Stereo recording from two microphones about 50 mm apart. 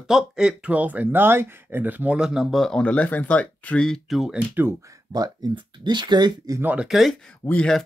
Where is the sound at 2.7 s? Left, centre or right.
Left.